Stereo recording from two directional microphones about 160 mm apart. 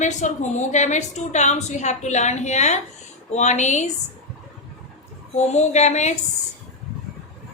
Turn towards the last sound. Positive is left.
turn(degrees=45)  # may be behind; listen again after turning